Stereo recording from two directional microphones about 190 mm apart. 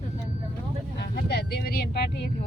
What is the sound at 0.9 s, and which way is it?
Vehicle, 60° left (ahead or behind).